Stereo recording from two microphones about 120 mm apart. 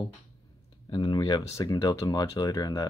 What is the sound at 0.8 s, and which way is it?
Speech, 40° left (ahead or behind).